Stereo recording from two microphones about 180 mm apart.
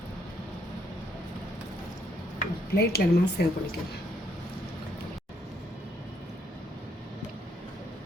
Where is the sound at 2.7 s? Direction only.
60° left (ahead or behind).